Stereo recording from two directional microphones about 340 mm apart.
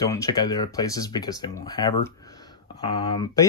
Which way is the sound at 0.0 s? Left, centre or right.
Centre.